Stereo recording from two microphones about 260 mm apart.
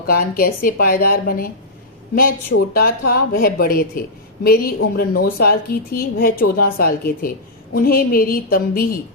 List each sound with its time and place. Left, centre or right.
0.1 s a woman's voice: left
2.7 s a woman's voice: left